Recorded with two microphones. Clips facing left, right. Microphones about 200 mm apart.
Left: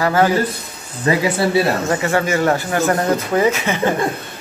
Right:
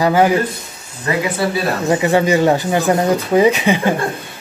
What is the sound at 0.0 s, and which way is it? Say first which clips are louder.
Speech: right 2 dB; 15° right (ahead or behind).